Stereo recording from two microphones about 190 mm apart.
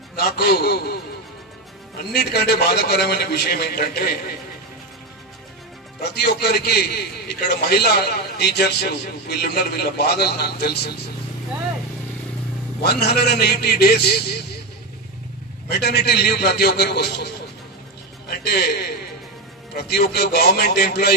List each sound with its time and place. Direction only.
0.1 s a man's voice: 55° left (ahead or behind)
2.1 s a man's voice: 55° left (ahead or behind)
6.0 s a man's voice: 60° left (ahead or behind)
12.8 s a man's voice: 60° left (ahead or behind)
15.7 s a man's voice: 60° left (ahead or behind)
18.3 s a man's voice: 55° left (ahead or behind)